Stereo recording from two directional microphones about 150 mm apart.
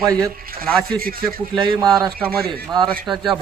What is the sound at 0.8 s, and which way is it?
Speech, 80° right.